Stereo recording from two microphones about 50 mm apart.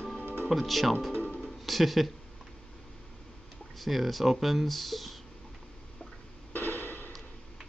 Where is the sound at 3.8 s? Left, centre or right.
Centre.